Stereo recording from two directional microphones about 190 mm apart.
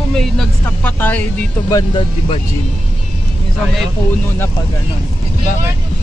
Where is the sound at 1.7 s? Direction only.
25° left (ahead or behind).